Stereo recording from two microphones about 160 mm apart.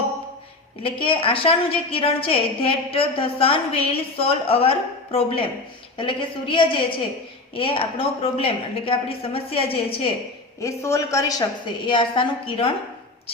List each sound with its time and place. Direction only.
0.8 s a woman's voice: 35° left (ahead or behind)
10.6 s a woman's voice: 20° left (ahead or behind)
11.9 s a woman's voice: 30° left (ahead or behind)